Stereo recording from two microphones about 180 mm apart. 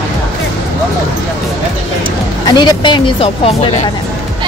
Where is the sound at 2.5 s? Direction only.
25° left (ahead or behind).